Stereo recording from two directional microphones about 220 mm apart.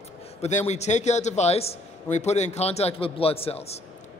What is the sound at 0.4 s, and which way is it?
A man's voice, 30° left (ahead or behind).